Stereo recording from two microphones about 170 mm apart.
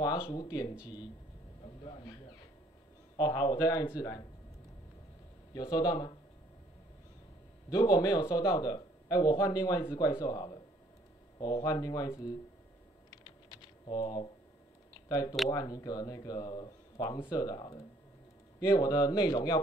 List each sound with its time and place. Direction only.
0.2 s speech: 25° left (ahead or behind)
1.8 s speech: 30° left (ahead or behind)
3.2 s speech: 25° left (ahead or behind)
5.5 s speech: 25° left (ahead or behind)
7.7 s speech: 20° left (ahead or behind)
13.2 s typing: 25° left (ahead or behind)
15.0 s speech: 20° left (ahead or behind)